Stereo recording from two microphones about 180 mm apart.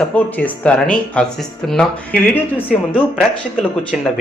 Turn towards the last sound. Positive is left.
turn(degrees=-5)  # may be behind; listen again after turning